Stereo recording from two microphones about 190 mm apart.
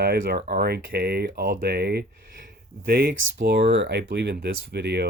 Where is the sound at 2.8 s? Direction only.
50° right (ahead or behind).